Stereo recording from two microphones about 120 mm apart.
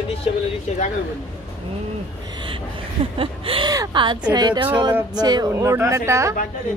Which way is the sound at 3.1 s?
50° right (ahead or behind).